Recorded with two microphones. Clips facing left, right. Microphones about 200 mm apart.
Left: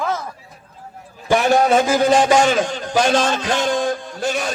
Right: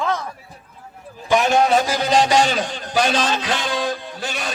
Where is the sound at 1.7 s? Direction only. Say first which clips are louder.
Left 4 dB; 50° left (ahead or behind).